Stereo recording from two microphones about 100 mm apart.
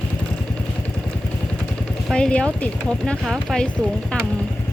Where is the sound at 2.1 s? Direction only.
10° left (ahead or behind).